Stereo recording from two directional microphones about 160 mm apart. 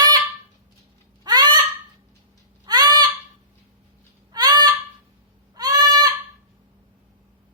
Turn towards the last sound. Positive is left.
turn(degrees=-25)  # may be behind; listen again after turning